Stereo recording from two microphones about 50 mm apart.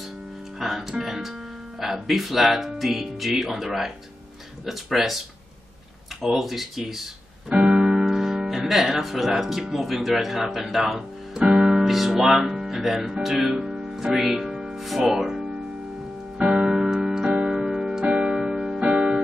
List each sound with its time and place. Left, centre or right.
0.6 s speech: centre
6.2 s speech: centre
7.4 s keyboard: centre
8.0 s speech: centre
10.9 s music: centre
14.8 s speech: centre
16.3 s music: centre
17.3 s keyboard: centre
18.9 s music: right